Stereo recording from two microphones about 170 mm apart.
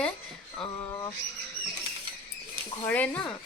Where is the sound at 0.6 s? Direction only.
25° left (ahead or behind).